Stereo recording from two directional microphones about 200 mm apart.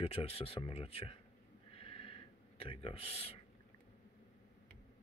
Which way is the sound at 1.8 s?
30° left (ahead or behind).